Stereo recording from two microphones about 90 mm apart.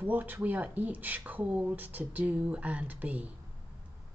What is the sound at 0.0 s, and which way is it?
A woman's voice, 20° right (ahead or behind).